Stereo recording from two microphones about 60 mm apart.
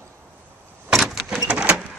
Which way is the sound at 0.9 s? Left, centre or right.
Centre.